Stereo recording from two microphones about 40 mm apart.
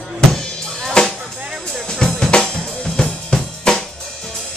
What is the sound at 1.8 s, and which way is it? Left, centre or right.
Drum kit, centre.